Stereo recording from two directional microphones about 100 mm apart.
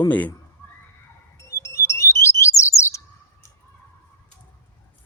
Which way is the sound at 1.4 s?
30° left (ahead or behind).